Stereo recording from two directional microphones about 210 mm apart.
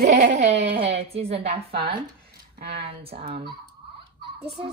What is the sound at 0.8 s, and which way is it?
A woman's voice, 30° right (ahead or behind).